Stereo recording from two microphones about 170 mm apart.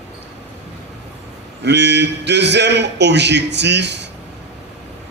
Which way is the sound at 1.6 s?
90° right.